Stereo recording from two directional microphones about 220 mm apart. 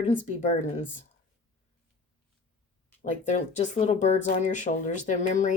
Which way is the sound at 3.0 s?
30° left (ahead or behind).